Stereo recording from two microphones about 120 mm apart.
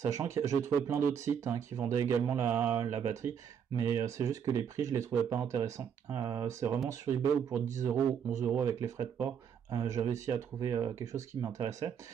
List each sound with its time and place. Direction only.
0.0 s speech: 25° right (ahead or behind)